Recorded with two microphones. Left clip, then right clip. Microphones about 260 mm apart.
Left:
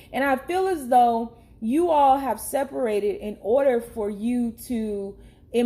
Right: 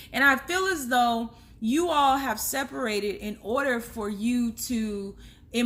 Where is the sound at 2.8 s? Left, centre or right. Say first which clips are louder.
Left 5 dB; right.